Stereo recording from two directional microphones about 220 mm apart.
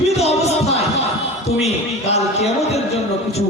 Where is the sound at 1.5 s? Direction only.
30° left (ahead or behind).